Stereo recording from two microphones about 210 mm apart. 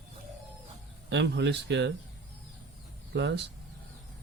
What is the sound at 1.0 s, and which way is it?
Speech, 55° right (ahead or behind).